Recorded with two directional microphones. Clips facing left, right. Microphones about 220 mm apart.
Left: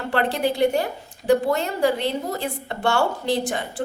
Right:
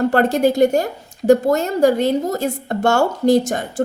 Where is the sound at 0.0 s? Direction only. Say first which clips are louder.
Right 8 dB; 45° right (ahead or behind).